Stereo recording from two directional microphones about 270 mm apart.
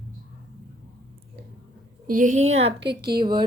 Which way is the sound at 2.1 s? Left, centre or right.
Right.